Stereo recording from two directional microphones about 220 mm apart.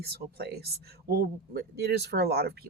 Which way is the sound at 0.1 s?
45° right (ahead or behind).